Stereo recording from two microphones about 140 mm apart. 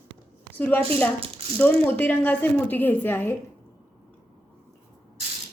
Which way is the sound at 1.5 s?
15° left (ahead or behind).